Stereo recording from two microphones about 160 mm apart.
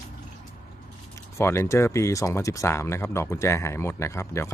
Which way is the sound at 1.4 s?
15° left (ahead or behind).